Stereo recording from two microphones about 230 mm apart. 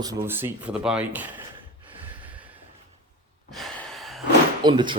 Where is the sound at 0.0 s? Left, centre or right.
Centre.